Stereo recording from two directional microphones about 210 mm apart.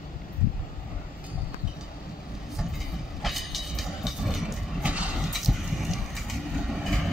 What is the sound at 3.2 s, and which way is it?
Train, centre (ahead or behind).